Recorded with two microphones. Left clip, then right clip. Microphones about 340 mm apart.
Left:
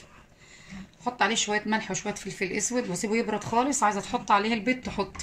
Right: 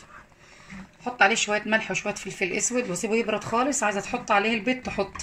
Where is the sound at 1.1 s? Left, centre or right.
Centre.